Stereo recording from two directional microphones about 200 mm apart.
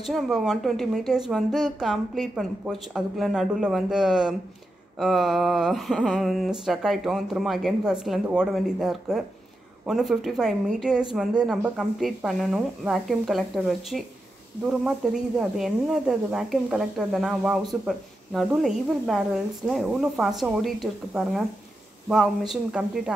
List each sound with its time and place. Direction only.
0.0 s speech: centre (ahead or behind)
15.5 s speech: centre (ahead or behind)